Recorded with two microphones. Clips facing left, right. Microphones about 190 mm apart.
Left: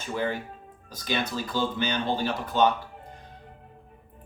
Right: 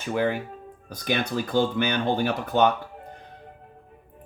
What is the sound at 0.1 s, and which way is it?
Speech, 60° right (ahead or behind).